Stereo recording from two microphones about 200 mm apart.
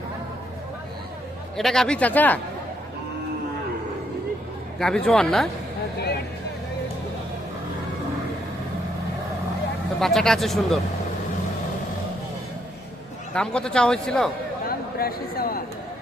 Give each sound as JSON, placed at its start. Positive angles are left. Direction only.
{"t": 1.5, "sound": "a man's voice", "side_deg": 0}
{"t": 4.8, "sound": "a man's voice", "side_deg": 5}
{"t": 10.0, "sound": "a man's voice", "side_deg": 0}
{"t": 13.3, "sound": "a man's voice", "side_deg": 5}
{"t": 14.7, "sound": "speech", "side_deg": 50}